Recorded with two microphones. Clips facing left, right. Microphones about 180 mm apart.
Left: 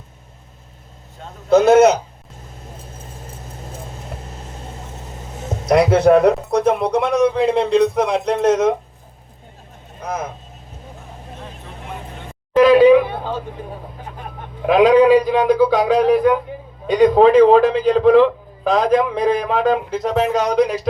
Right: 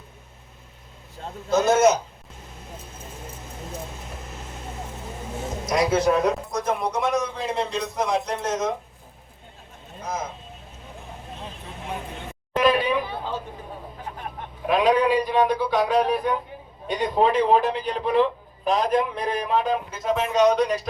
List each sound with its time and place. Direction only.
1.5 s a man's voice: 60° left (ahead or behind)
5.6 s a man's voice: 60° left (ahead or behind)
10.0 s a man's voice: 60° left (ahead or behind)
12.6 s a sound: 90° left
14.8 s a man's voice: 90° left